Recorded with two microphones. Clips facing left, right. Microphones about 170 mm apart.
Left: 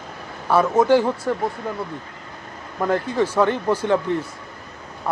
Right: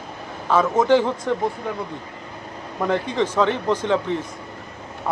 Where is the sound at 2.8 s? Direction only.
5° left (ahead or behind).